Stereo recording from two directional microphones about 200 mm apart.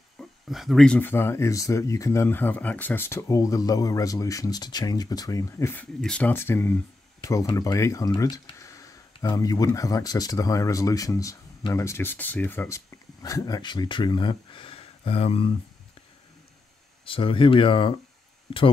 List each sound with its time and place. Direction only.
0.2 s speech: centre (ahead or behind); by 15.5 s 30° left (ahead or behind)
17.0 s speech: 25° left (ahead or behind)